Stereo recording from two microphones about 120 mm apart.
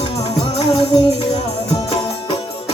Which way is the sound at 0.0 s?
55° left (ahead or behind).